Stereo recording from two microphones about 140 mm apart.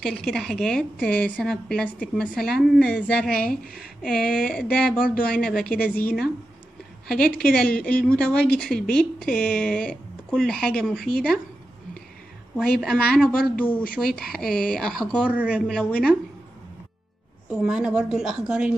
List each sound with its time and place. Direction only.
0.0 s a woman's voice: 5° left (ahead or behind)
3.3 s a woman's voice: 90° left
4.0 s a woman's voice: 5° left (ahead or behind)
12.5 s a woman's voice: 5° left (ahead or behind)
15.2 s speech: 10° right (ahead or behind)
15.7 s speech: 5° left (ahead or behind)
17.6 s a woman's voice: 5° right (ahead or behind)